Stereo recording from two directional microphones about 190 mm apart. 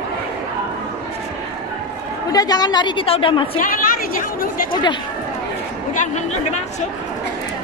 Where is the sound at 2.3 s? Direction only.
20° left (ahead or behind).